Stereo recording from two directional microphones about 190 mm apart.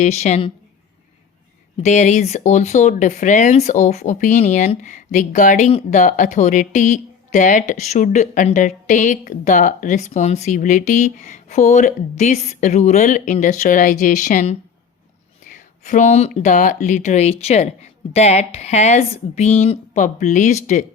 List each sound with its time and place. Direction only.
0.0 s speech: 35° left (ahead or behind)
1.8 s speech: 40° left (ahead or behind)